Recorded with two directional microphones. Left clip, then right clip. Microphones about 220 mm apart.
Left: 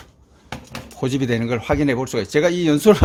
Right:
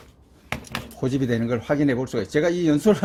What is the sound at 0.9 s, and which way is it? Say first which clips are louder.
Speech: left 3 dB; 30° left (ahead or behind).